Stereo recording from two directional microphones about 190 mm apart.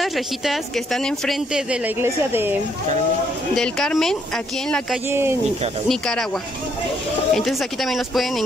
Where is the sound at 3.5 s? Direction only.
5° left (ahead or behind).